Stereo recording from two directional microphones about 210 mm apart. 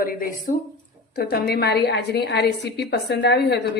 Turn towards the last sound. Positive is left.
turn(degrees=50)  # may be behind; listen again after turning